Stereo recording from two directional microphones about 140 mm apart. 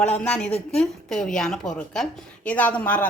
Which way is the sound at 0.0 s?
10° left (ahead or behind).